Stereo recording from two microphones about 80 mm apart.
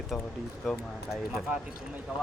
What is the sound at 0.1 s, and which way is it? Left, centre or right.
Speech, centre.